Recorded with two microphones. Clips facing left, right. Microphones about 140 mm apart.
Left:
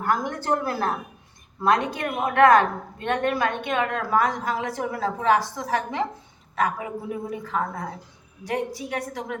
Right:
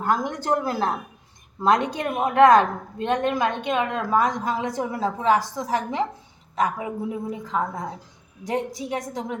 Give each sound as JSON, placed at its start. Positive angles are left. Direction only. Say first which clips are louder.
{"t": 0.0, "sound": "a woman's voice", "louder": "right 1 dB", "side_deg": -20}